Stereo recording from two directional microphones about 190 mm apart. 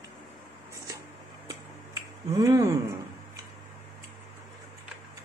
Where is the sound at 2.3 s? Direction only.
15° right (ahead or behind).